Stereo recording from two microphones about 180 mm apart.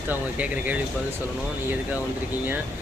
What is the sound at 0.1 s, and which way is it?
Speech, 10° right (ahead or behind).